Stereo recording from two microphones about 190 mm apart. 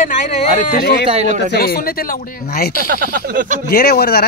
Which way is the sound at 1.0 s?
35° right (ahead or behind).